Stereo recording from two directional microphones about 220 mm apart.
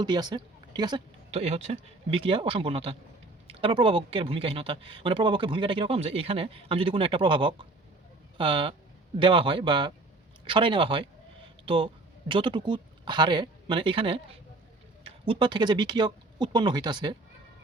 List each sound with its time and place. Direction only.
0.0 s speech: 20° right (ahead or behind)
1.3 s speech: 30° right (ahead or behind)